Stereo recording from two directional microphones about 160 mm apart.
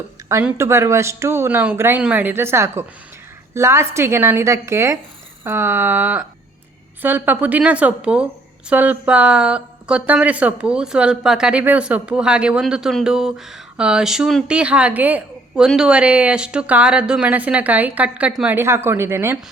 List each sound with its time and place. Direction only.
0.4 s a woman's voice: 15° right (ahead or behind)